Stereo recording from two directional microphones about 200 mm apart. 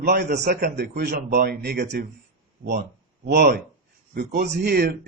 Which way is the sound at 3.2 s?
55° right (ahead or behind).